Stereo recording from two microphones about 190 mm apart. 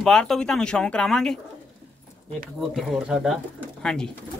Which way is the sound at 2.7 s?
Centre (ahead or behind).